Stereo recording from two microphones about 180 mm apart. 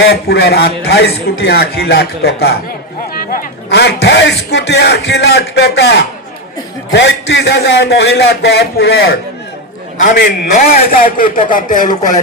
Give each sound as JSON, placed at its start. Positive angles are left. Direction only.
{"t": 0.0, "sound": "a man's voice", "side_deg": 65}
{"t": 10.0, "sound": "a man's voice", "side_deg": 45}